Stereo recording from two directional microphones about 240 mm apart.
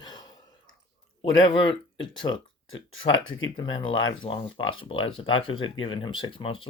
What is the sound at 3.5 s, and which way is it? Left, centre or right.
Speech, centre.